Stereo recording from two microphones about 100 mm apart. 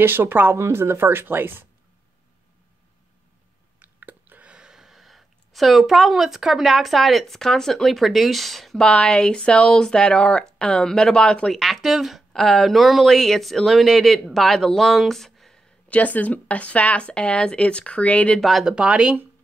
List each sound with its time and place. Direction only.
0.0 s speech: 20° right (ahead or behind)
3.8 s speech: 15° right (ahead or behind); by 15.6 s 5° left (ahead or behind)
15.9 s speech: 15° left (ahead or behind)
18.4 s speech: centre (ahead or behind)